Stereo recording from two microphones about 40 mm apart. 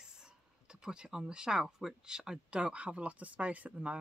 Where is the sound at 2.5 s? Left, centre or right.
Right.